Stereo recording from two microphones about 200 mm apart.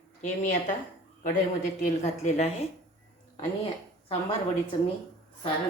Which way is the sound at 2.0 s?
35° left (ahead or behind).